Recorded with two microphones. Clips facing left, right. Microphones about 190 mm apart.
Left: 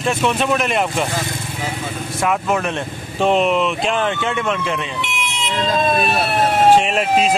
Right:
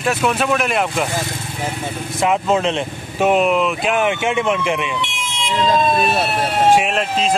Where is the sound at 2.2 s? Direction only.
20° right (ahead or behind).